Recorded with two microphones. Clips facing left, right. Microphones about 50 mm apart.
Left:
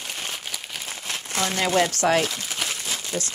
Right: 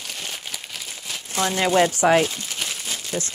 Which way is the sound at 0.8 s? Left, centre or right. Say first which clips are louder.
Left 2 dB; left.